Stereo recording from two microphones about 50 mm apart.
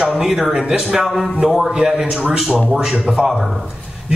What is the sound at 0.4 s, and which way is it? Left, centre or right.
Speech, centre.